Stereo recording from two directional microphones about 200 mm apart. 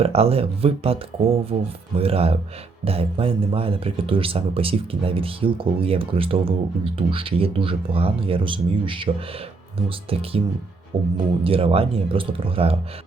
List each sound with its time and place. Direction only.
0.0 s speech: 30° right (ahead or behind)